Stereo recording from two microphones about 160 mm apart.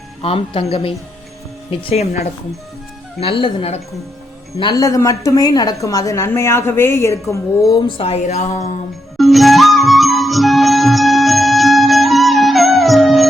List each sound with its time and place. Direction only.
0.2 s speech: 35° left (ahead or behind)
4.5 s a woman's voice: 25° left (ahead or behind)
7.9 s speech: 35° left (ahead or behind)
9.1 s music: centre (ahead or behind)